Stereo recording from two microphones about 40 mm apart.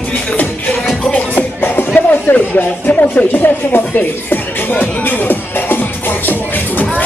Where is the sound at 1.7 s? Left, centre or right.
Left.